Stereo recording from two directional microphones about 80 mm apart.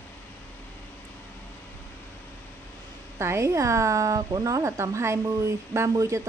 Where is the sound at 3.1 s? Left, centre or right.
Right.